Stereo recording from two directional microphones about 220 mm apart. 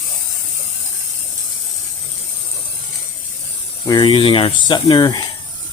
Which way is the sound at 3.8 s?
20° left (ahead or behind).